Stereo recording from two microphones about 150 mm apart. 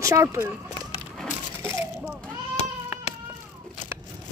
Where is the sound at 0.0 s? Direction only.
20° right (ahead or behind).